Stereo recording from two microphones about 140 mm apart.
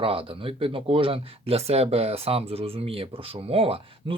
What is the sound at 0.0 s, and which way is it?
Speech, 40° right (ahead or behind).